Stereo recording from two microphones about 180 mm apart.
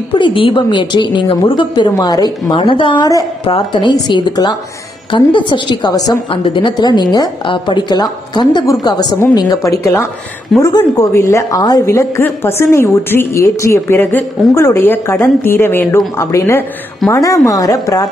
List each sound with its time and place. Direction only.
0.1 s a woman's voice: 30° left (ahead or behind)